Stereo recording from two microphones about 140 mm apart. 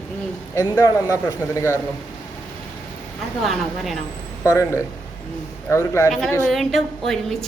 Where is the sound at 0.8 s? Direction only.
20° left (ahead or behind).